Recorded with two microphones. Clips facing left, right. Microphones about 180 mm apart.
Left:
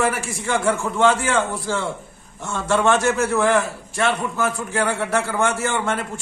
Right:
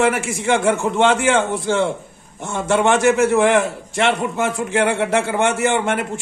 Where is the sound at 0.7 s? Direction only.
20° right (ahead or behind).